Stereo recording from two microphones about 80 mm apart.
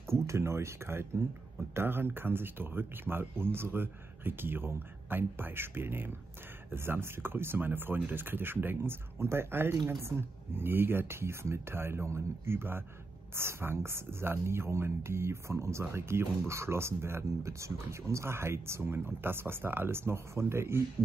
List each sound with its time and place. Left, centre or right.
0.1 s speech: right